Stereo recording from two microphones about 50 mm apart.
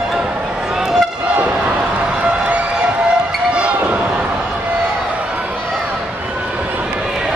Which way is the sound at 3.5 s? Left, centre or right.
Right.